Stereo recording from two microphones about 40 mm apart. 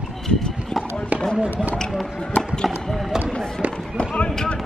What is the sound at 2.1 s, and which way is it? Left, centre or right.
Speech, centre.